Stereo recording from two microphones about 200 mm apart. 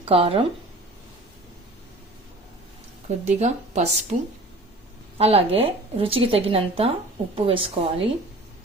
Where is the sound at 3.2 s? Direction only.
35° right (ahead or behind).